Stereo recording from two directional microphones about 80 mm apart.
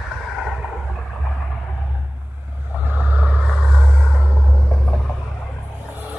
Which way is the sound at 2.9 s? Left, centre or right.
Centre.